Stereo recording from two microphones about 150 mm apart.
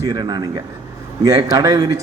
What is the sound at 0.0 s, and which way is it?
A man's voice, 25° right (ahead or behind).